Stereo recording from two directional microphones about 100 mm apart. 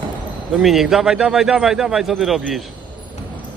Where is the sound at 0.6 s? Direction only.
5° right (ahead or behind).